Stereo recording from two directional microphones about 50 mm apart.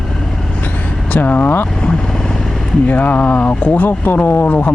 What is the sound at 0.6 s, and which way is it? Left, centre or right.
Vehicle, left.